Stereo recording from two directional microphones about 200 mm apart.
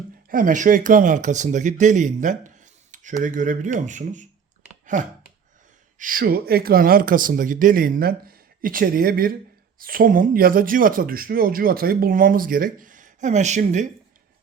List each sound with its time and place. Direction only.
0.3 s speech: 45° right (ahead or behind)